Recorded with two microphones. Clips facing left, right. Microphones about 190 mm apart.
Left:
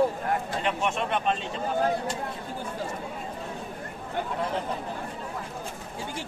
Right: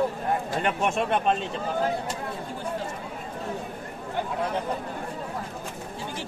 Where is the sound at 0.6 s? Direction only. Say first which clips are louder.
Right 2 dB; 50° right (ahead or behind).